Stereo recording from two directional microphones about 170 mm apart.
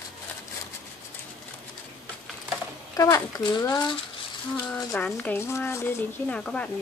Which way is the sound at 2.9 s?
20° left (ahead or behind).